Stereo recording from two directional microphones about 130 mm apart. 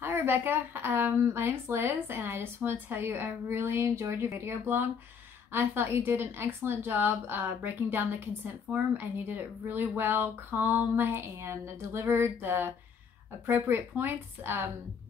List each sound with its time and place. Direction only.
0.0 s a woman's voice: 15° right (ahead or behind)